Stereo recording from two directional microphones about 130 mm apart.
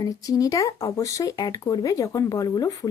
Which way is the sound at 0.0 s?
25° left (ahead or behind).